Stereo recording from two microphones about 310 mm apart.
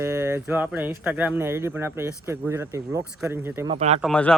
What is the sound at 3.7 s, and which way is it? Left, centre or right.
Speech, right.